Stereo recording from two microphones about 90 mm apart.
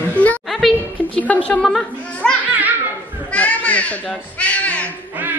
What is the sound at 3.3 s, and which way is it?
Children playing, 15° left (ahead or behind).